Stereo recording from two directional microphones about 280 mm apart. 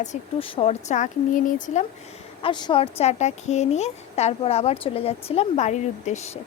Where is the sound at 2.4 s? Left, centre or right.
Centre.